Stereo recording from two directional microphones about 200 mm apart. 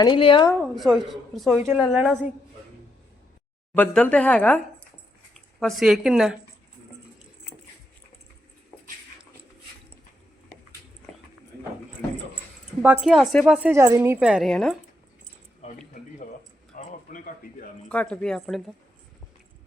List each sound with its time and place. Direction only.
0.0 s a woman's voice: 25° left (ahead or behind)
0.6 s a woman's voice: centre (ahead or behind)
1.5 s a woman's voice: 15° right (ahead or behind)
1.9 s a woman's voice: centre (ahead or behind)
3.8 s a woman's voice: 5° left (ahead or behind)
8.7 s dog: 5° left (ahead or behind)
13.1 s a woman's voice: centre (ahead or behind)
15.6 s a sound: 35° left (ahead or behind)
17.8 s a woman's voice: 5° left (ahead or behind)